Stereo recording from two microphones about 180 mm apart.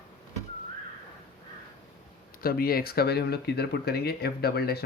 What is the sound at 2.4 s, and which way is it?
Speech, 55° left (ahead or behind).